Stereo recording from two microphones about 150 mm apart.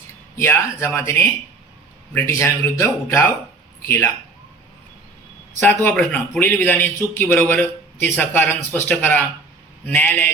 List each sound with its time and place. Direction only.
0.3 s a man's voice: 15° left (ahead or behind)
5.8 s a man's voice: 10° left (ahead or behind)